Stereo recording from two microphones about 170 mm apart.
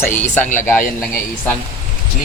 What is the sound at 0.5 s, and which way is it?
Speech, 10° left (ahead or behind).